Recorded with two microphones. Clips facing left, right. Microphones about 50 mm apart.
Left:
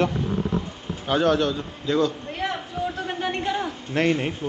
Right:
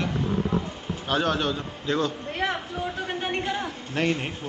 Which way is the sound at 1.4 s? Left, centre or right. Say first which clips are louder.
Left 3 dB; centre.